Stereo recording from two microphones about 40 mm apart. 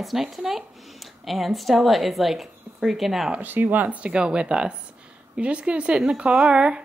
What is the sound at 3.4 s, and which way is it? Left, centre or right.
Speech, right.